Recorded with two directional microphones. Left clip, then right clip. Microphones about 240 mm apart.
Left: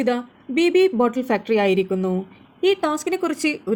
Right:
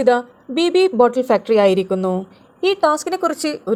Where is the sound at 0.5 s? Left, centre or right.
Centre.